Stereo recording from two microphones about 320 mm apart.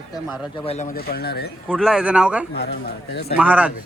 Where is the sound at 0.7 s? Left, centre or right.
Left.